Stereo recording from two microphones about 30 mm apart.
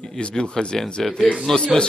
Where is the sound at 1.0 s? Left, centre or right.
Centre.